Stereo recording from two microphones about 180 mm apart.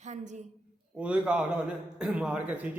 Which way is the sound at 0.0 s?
40° right (ahead or behind).